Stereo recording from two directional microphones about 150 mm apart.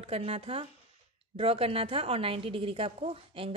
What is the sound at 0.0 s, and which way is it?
A woman's voice, 40° right (ahead or behind).